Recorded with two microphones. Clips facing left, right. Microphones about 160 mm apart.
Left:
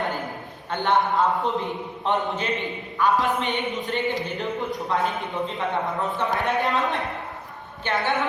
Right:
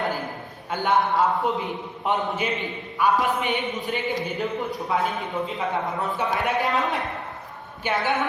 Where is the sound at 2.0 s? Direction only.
10° right (ahead or behind).